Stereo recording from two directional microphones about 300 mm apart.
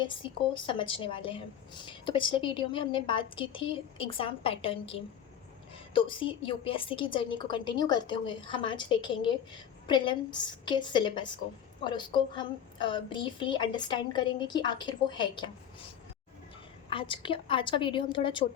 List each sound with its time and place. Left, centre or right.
0.0 s a woman's voice: centre
16.9 s a woman's voice: centre